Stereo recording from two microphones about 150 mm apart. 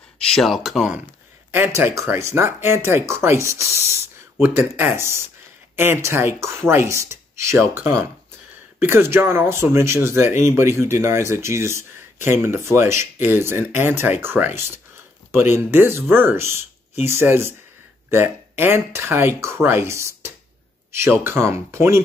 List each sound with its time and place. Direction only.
0.3 s speech: centre (ahead or behind)
1.5 s speech: 15° right (ahead or behind)